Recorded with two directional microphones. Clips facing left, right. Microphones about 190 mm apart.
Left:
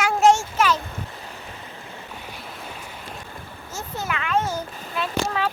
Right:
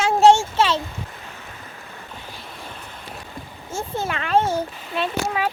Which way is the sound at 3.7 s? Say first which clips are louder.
Right 4 dB; 30° right (ahead or behind).